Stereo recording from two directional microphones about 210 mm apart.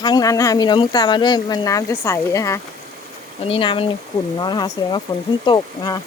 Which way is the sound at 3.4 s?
25° left (ahead or behind).